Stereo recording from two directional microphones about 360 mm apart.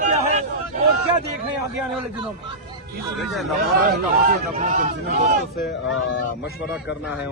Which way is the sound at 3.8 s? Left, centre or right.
Right.